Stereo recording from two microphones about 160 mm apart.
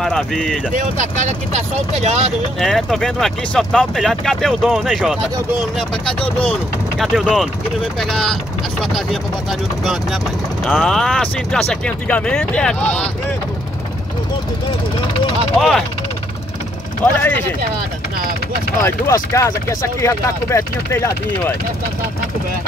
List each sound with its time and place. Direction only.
0.0 s speech: 5° left (ahead or behind)
0.7 s speech: 50° right (ahead or behind)
2.6 s speech: centre (ahead or behind)
7.0 s speech: centre (ahead or behind)
15.5 s speech: centre (ahead or behind)
17.0 s speech: 10° left (ahead or behind)
18.9 s speech: 20° left (ahead or behind)